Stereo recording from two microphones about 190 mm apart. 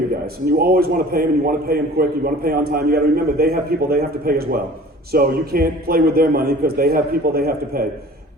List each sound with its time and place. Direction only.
0.6 s a man's voice: 50° right (ahead or behind)